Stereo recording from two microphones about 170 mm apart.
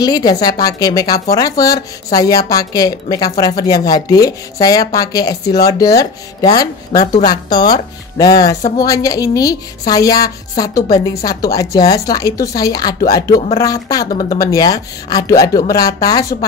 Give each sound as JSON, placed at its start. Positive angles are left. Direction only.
{"t": 0.0, "sound": "a woman's voice", "side_deg": 25}